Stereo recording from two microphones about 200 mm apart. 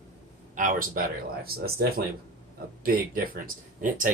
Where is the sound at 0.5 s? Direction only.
45° right (ahead or behind).